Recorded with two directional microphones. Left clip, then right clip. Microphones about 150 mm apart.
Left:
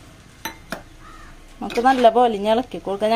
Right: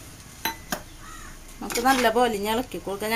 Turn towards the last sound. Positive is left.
turn(degrees=40)  # may be behind; listen again after turning